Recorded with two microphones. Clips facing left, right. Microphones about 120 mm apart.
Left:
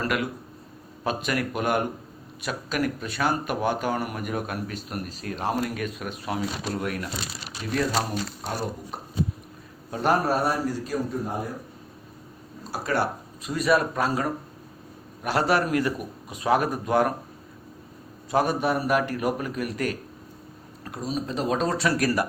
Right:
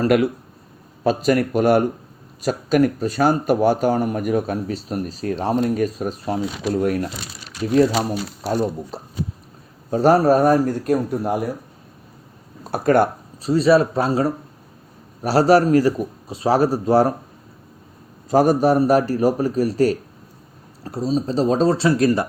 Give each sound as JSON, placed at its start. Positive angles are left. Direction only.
{"t": 1.0, "sound": "speech", "side_deg": -40}
{"t": 9.9, "sound": "a man's voice", "side_deg": -40}
{"t": 12.7, "sound": "a man's voice", "side_deg": -50}
{"t": 13.4, "sound": "speech", "side_deg": -30}
{"t": 18.3, "sound": "speech", "side_deg": -40}